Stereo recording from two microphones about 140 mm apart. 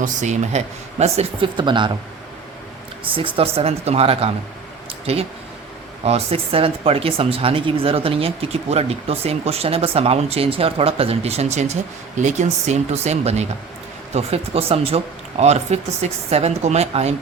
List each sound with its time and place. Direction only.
0.0 s speech: 60° right (ahead or behind)
1.5 s speech: 35° right (ahead or behind)
3.0 s speech: 40° right (ahead or behind)